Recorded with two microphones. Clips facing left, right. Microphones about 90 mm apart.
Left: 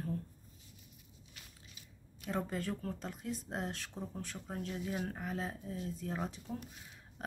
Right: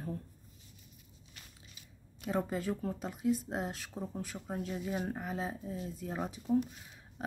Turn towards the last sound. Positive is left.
turn(degrees=-5)  # may be behind; listen again after turning